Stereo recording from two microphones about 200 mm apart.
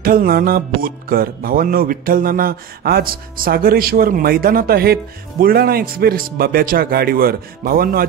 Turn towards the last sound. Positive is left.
turn(degrees=-50)  # may be behind; listen again after turning